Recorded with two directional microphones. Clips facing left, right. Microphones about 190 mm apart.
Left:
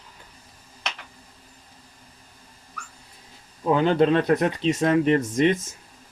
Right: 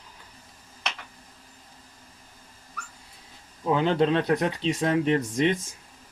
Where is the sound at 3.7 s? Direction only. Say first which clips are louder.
Left 3 dB; 50° left (ahead or behind).